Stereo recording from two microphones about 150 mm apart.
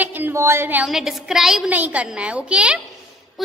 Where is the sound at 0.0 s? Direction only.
10° right (ahead or behind).